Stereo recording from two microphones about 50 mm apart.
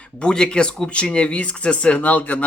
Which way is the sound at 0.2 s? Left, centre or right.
Centre.